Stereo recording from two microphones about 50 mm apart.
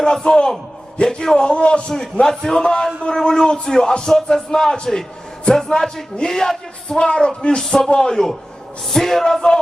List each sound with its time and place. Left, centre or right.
0.0 s speech: centre
2.3 s speech: centre